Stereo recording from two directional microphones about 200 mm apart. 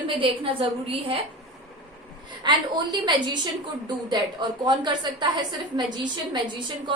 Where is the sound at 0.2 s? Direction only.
30° right (ahead or behind).